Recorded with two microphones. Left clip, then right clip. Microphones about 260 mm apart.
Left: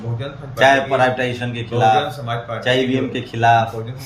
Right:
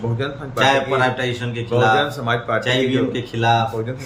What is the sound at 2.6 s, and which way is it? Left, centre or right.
Speech, centre.